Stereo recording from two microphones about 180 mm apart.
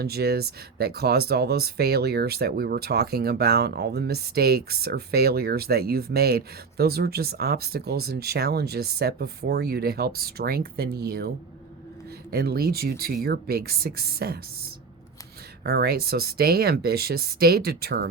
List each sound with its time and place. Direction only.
0.0 s speech: 60° right (ahead or behind)
12.3 s speech: 60° right (ahead or behind)
15.6 s speech: 60° right (ahead or behind)